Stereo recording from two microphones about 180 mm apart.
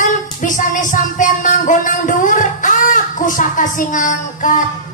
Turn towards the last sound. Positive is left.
turn(degrees=45)  # may be behind; listen again after turning